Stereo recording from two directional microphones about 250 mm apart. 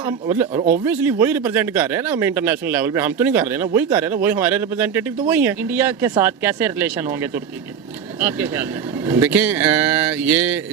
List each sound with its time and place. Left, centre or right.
0.0 s speech: centre
0.5 s speech: right
0.9 s speech: centre